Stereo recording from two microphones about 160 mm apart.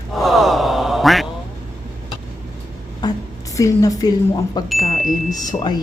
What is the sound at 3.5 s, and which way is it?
A woman's voice, 20° left (ahead or behind).